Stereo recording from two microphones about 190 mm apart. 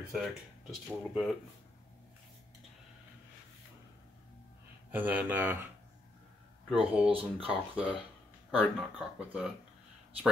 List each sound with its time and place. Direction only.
0.1 s speech: centre (ahead or behind)
4.9 s speech: 10° right (ahead or behind)
6.7 s speech: 5° right (ahead or behind)
7.1 s speech: 30° right (ahead or behind)
7.4 s speech: 5° right (ahead or behind)